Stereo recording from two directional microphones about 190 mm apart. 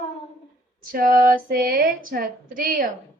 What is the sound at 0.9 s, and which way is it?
Speech, 45° right (ahead or behind).